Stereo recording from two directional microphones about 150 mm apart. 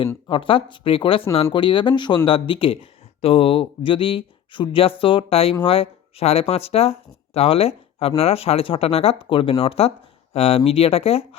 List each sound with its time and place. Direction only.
0.3 s speech: 35° left (ahead or behind)